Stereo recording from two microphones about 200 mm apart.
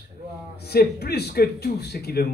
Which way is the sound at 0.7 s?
55° left (ahead or behind).